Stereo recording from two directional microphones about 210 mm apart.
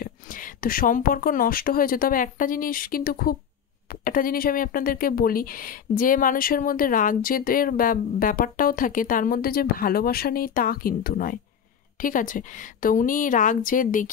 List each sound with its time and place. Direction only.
0.0 s a woman's voice: 40° left (ahead or behind)